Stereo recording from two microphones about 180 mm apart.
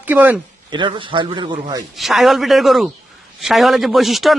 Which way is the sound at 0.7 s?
25° right (ahead or behind).